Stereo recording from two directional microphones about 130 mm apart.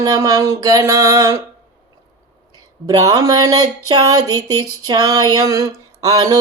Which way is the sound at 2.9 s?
30° right (ahead or behind).